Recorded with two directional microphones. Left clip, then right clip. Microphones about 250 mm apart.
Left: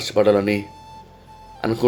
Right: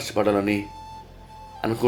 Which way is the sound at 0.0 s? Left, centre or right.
Centre.